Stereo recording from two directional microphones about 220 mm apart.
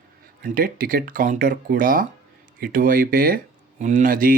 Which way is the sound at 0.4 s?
40° right (ahead or behind).